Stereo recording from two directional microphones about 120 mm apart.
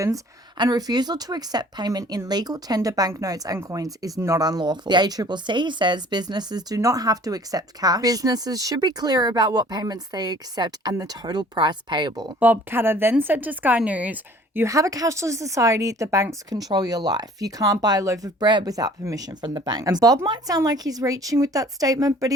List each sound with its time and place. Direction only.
0.6 s speech: 35° right (ahead or behind)
12.4 s a woman's voice: 15° right (ahead or behind)